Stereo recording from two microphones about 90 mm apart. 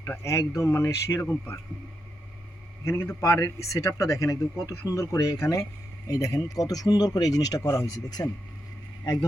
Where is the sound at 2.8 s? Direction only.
30° left (ahead or behind).